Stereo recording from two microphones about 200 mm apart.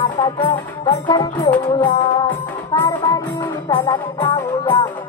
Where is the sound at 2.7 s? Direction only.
20° left (ahead or behind).